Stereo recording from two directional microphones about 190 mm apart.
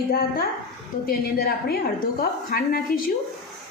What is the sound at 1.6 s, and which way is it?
A woman's voice, 55° left (ahead or behind).